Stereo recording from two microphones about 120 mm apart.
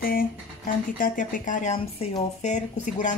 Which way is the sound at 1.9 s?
80° left.